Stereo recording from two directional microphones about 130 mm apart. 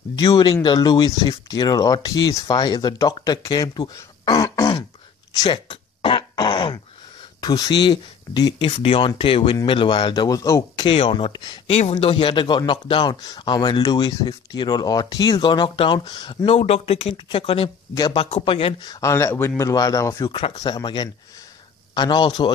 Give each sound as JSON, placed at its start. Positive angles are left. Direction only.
{"t": 0.2, "sound": "speech", "side_deg": 30}
{"t": 5.3, "sound": "throat clearing", "side_deg": 35}
{"t": 7.3, "sound": "speech", "side_deg": 30}
{"t": 8.7, "sound": "speech", "side_deg": 45}
{"t": 10.9, "sound": "speech", "side_deg": 45}
{"t": 11.7, "sound": "speech", "side_deg": 50}
{"t": 16.4, "sound": "speech", "side_deg": 50}
{"t": 18.9, "sound": "speech", "side_deg": 25}
{"t": 20.2, "sound": "speech", "side_deg": 45}
{"t": 20.5, "sound": "speech", "side_deg": 30}